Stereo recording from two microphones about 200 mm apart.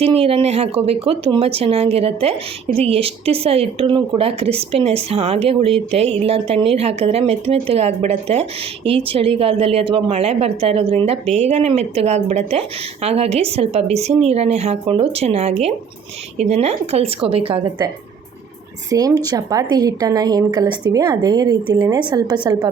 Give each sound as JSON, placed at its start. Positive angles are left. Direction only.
{"t": 0.0, "sound": "a woman's voice", "side_deg": -30}